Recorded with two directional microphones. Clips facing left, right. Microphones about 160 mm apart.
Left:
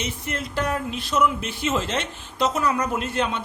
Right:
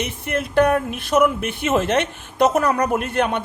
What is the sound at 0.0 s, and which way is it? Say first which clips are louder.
A woman's voice: right 5 dB; 60° right (ahead or behind).